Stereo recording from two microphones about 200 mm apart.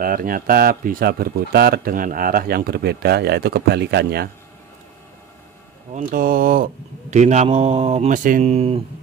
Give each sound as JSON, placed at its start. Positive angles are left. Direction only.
{"t": 0.0, "sound": "speech", "side_deg": -45}
{"t": 5.9, "sound": "speech", "side_deg": -45}